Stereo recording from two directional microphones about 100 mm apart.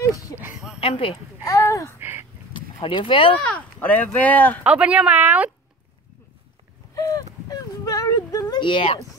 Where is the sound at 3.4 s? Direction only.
15° left (ahead or behind).